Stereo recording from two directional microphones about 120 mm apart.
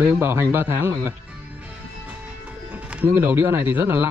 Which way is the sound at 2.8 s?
15° right (ahead or behind).